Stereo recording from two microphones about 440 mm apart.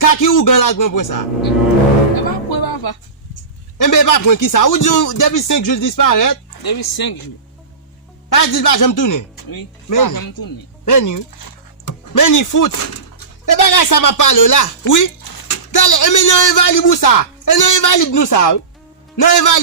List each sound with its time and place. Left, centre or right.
0.0 s speech: left
2.5 s a sound: left
3.8 s speech: left
8.3 s speech: left